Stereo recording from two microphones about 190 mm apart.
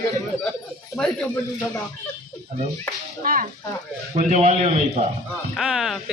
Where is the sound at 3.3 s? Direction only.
50° right (ahead or behind).